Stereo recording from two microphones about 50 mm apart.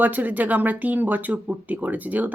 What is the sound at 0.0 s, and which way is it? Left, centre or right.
Speech, right.